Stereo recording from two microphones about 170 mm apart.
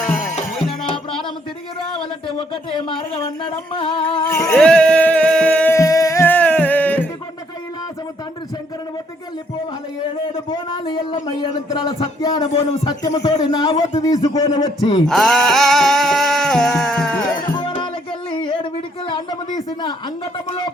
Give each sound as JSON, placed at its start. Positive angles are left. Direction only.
{"t": 0.0, "sound": "music", "side_deg": 5}
{"t": 3.4, "sound": "music", "side_deg": 30}
{"t": 4.3, "sound": "a sound", "side_deg": 20}
{"t": 4.5, "sound": "music", "side_deg": 5}
{"t": 10.3, "sound": "a sound", "side_deg": 30}
{"t": 12.2, "sound": "a man's voice", "side_deg": 25}
{"t": 15.0, "sound": "music", "side_deg": 0}
{"t": 17.6, "sound": "music", "side_deg": 30}
{"t": 18.3, "sound": "a sound", "side_deg": 30}